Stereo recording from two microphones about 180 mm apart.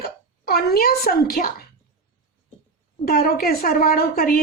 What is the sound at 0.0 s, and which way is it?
Speech, 60° left (ahead or behind).